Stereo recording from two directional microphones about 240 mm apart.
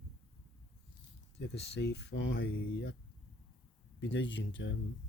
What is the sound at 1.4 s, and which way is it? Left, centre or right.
Speech, left.